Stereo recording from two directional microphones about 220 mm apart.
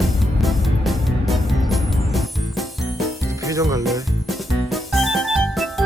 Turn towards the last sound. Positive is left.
turn(degrees=0)  # may be behind; listen again after turning